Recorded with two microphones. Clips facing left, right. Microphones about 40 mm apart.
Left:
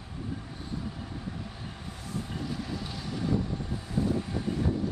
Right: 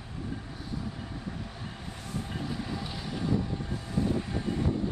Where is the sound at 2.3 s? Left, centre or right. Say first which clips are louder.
Right 1 dB; centre.